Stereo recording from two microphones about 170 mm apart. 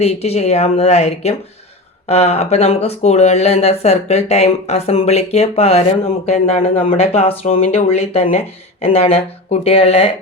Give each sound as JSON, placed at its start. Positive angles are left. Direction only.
{"t": 0.0, "sound": "speech", "side_deg": 40}